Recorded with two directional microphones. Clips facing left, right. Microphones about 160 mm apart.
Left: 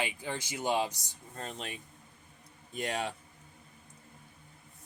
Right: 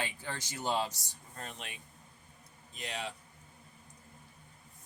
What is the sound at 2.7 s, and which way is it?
Speech, 50° left (ahead or behind).